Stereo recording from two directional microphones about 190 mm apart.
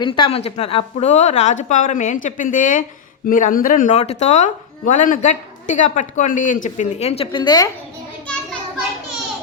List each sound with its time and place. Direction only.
0.0 s speech: 30° left (ahead or behind)